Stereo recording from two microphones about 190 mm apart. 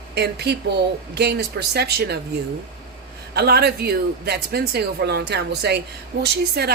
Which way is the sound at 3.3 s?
55° right (ahead or behind).